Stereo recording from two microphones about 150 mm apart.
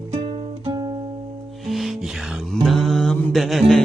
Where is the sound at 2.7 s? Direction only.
Centre (ahead or behind).